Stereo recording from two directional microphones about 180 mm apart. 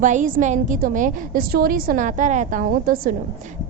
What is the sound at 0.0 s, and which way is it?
A woman's voice, 45° right (ahead or behind).